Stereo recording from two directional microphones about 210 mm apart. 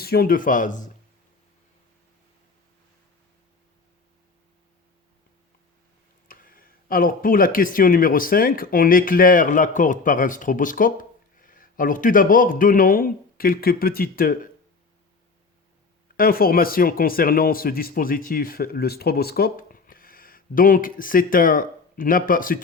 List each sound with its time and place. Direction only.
0.0 s speech: 45° left (ahead or behind)
6.2 s speech: 40° left (ahead or behind)
16.1 s speech: 45° left (ahead or behind)